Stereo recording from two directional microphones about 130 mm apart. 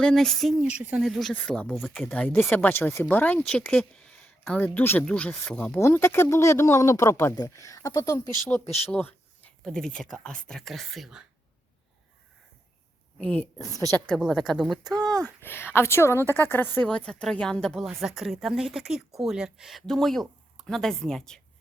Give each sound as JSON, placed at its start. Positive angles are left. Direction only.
{"t": 0.0, "sound": "speech", "side_deg": 5}
{"t": 0.8, "sound": "speech", "side_deg": -10}
{"t": 8.5, "sound": "speech", "side_deg": 10}
{"t": 8.9, "sound": "a sound", "side_deg": 15}
{"t": 9.6, "sound": "speech", "side_deg": 5}
{"t": 13.1, "sound": "speech", "side_deg": 10}
{"t": 15.4, "sound": "speech", "side_deg": 15}